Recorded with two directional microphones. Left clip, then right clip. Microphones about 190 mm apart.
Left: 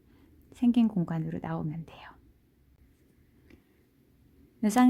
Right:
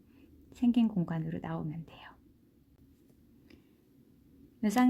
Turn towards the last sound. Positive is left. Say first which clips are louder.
# left 4 dB
turn(degrees=20)  # may be behind; listen again after turning